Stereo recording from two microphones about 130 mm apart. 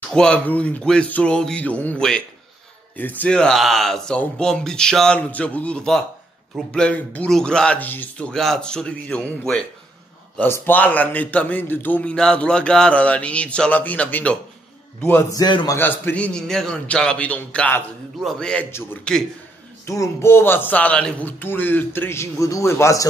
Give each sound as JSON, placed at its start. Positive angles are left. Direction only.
{"t": 0.1, "sound": "a man's voice", "side_deg": 10}
{"t": 15.3, "sound": "a man's voice", "side_deg": 30}
{"t": 15.8, "sound": "a man's voice", "side_deg": 15}
{"t": 19.9, "sound": "a man's voice", "side_deg": 20}